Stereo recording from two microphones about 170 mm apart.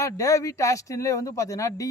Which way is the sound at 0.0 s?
20° left (ahead or behind).